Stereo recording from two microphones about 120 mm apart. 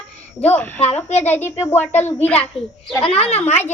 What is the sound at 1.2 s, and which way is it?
A woman's voice, 20° left (ahead or behind).